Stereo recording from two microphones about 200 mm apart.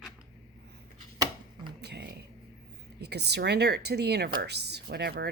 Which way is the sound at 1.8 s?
55° right (ahead or behind).